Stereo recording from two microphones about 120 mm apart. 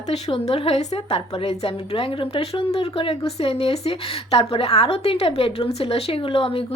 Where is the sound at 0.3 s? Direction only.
55° left (ahead or behind).